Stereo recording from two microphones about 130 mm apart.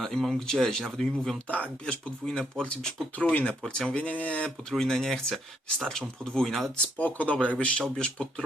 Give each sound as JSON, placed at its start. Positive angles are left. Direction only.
{"t": 0.0, "sound": "speech", "side_deg": 5}